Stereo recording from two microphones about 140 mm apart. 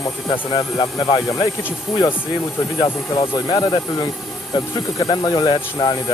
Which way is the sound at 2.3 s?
30° left (ahead or behind).